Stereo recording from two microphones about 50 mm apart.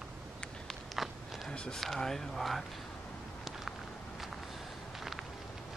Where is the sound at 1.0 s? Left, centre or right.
Centre.